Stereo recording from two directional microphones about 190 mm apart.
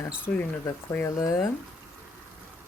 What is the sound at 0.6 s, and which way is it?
Speech, 15° left (ahead or behind).